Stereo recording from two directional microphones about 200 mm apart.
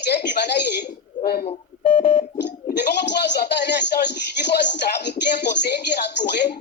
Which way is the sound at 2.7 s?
60° left (ahead or behind).